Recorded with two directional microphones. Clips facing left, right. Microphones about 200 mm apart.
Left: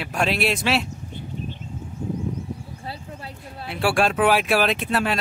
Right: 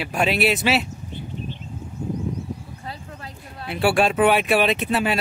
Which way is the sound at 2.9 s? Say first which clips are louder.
Left 1 dB; 30° left (ahead or behind).